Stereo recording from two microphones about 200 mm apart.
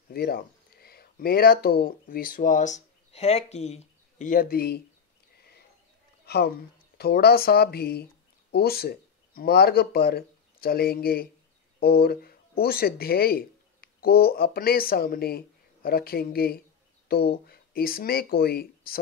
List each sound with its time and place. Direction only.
0.1 s speech: 50° left (ahead or behind)
6.2 s a woman's voice: 55° left (ahead or behind)